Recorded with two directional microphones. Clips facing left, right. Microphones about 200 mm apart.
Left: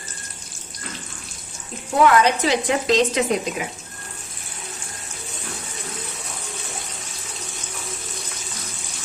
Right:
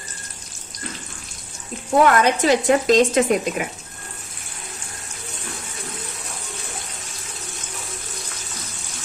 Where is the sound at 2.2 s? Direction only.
45° right (ahead or behind).